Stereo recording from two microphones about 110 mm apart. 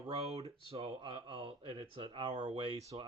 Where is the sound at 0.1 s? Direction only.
65° right (ahead or behind).